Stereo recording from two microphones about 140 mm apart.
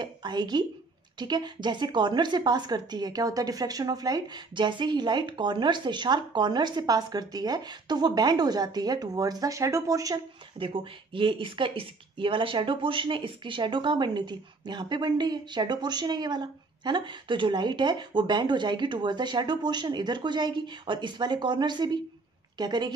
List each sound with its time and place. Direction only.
0.0 s a sound: 30° right (ahead or behind)
1.2 s a woman's voice: 30° right (ahead or behind)
10.6 s speech: 40° right (ahead or behind)